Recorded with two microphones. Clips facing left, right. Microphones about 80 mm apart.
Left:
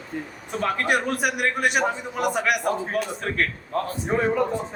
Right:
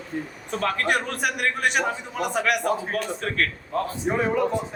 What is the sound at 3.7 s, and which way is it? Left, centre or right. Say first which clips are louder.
Speech: even; left.